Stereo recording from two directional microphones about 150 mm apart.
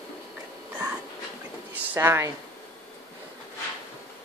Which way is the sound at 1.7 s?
15° right (ahead or behind).